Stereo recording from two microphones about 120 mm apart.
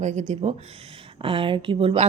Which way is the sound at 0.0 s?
75° right (ahead or behind).